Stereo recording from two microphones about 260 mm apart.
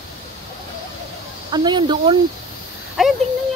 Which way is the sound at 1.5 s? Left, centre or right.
Centre.